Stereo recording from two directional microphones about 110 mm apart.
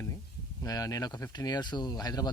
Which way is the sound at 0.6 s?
30° left (ahead or behind).